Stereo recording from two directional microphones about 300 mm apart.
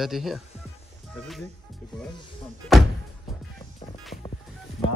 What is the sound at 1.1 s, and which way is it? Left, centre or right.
Music, centre.